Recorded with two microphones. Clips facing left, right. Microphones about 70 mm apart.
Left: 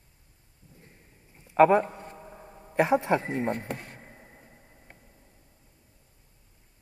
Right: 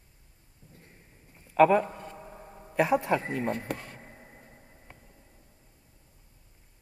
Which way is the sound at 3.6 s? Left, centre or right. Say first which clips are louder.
Right 1 dB; right.